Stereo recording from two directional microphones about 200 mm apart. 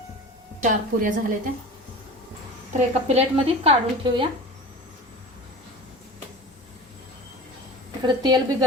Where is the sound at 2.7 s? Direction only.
30° right (ahead or behind).